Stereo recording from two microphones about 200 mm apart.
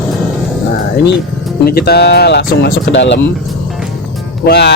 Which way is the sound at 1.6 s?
50° left (ahead or behind).